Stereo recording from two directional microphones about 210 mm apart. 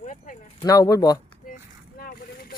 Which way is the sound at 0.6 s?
15° left (ahead or behind).